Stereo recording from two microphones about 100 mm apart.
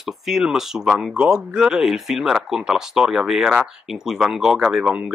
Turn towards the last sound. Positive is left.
turn(degrees=-10)  # may be behind; listen again after turning